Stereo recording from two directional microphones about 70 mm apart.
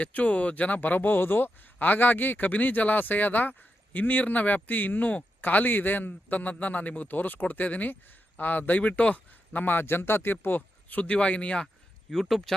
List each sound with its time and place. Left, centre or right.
0.0 s a man's voice: left
12.1 s speech: centre